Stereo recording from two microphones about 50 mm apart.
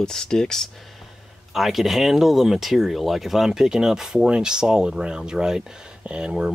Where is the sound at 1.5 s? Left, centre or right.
Centre.